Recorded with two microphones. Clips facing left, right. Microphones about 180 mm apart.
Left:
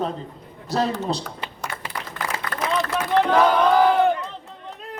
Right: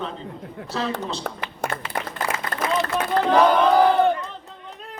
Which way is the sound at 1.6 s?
55° right (ahead or behind).